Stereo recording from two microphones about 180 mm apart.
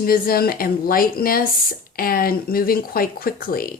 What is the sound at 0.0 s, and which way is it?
Speech, 55° left (ahead or behind).